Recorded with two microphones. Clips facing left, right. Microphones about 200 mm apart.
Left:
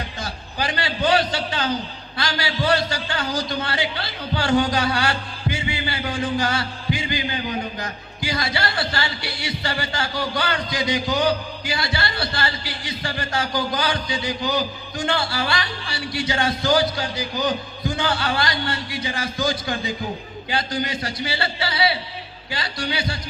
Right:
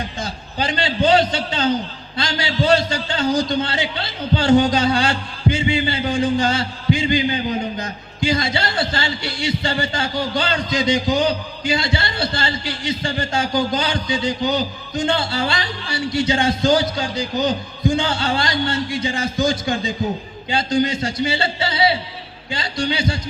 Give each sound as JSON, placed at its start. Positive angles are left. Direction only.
{"t": 0.2, "sound": "a man's voice", "side_deg": -20}